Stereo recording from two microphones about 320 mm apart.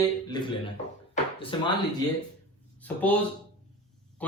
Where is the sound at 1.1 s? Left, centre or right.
Centre.